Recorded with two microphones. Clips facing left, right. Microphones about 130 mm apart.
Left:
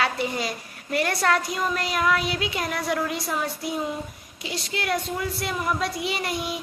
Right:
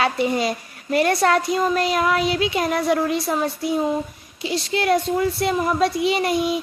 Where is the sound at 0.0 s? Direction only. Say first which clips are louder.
Right 6 dB; 20° right (ahead or behind).